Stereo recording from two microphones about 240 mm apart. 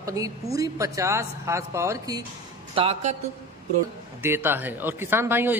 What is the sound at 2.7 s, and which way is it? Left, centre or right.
Speech, right.